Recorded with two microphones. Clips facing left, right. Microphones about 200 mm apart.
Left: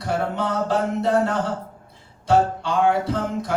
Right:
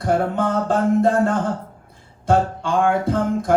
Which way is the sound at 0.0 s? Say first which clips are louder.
Right 5 dB; 50° right (ahead or behind).